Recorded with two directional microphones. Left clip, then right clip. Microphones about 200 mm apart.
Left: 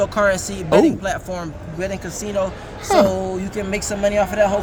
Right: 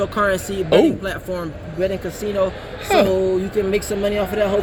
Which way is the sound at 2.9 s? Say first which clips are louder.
Left 1 dB; 25° left (ahead or behind).